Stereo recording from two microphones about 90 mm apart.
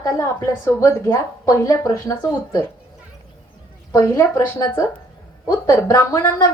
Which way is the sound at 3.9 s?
35° left (ahead or behind).